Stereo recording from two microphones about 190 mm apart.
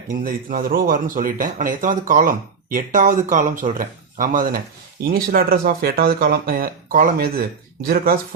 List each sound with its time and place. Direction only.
0.3 s speech: 50° right (ahead or behind)